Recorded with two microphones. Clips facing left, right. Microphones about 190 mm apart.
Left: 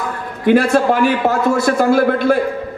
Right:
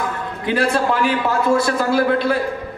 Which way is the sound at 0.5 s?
55° left (ahead or behind).